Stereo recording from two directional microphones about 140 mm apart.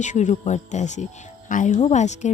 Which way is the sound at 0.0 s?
60° left (ahead or behind).